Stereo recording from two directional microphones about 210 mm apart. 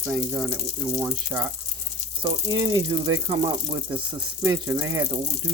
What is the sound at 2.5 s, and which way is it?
Speech, 20° right (ahead or behind).